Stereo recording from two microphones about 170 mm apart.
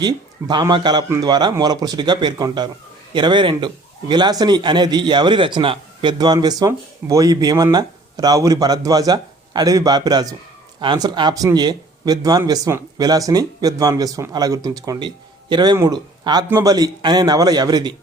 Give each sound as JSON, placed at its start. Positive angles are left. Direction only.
{"t": 0.0, "sound": "a man's voice", "side_deg": -25}